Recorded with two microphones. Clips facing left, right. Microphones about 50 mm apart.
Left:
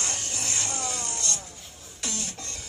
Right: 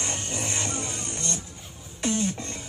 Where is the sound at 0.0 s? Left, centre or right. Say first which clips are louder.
Right 2 dB; right.